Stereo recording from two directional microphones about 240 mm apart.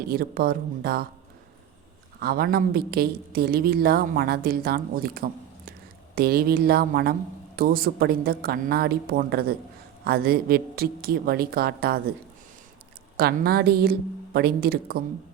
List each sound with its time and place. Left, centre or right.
0.1 s a woman's voice: right
2.1 s a woman's voice: right
13.1 s a woman's voice: right